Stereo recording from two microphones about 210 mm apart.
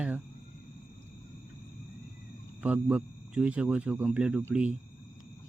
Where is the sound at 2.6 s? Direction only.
5° right (ahead or behind).